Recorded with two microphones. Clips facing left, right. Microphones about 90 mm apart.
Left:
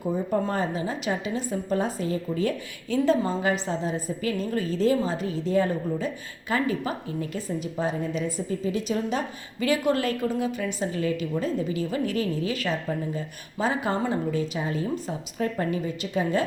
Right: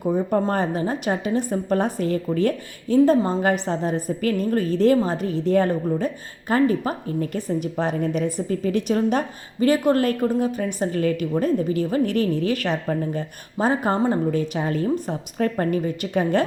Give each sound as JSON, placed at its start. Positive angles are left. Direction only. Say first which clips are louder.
{"t": 0.0, "sound": "a woman's voice", "louder": "right 5 dB", "side_deg": -50}
{"t": 7.3, "sound": "a woman's voice", "louder": "right 4 dB", "side_deg": -60}
{"t": 13.6, "sound": "a woman's voice", "louder": "right 5 dB", "side_deg": -45}